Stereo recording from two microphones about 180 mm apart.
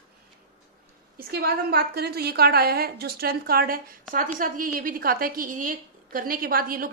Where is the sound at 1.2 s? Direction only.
60° right (ahead or behind).